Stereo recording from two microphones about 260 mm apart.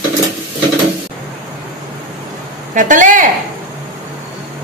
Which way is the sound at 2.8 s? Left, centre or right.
Right.